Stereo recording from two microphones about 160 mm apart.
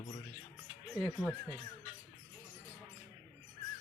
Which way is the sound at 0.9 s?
Centre (ahead or behind).